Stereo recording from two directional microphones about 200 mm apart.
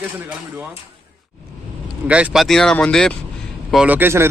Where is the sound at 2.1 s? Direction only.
5° right (ahead or behind).